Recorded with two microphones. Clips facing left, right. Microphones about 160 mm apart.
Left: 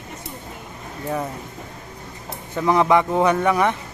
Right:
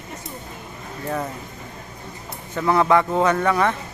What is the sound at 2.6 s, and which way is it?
A man's voice, 10° left (ahead or behind).